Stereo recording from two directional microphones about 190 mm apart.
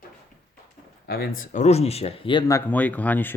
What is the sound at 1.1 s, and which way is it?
Speech, 50° left (ahead or behind).